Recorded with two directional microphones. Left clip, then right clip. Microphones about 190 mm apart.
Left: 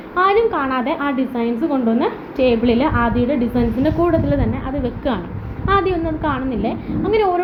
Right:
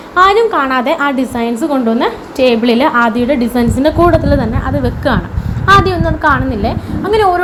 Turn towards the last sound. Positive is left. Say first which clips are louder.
# right 6 dB
turn(degrees=-20)  # may be behind; listen again after turning